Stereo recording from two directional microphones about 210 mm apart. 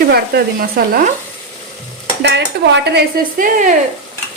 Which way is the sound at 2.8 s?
45° right (ahead or behind).